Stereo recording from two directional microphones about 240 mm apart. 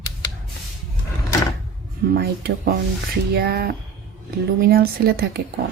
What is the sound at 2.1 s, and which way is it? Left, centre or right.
Speech, right.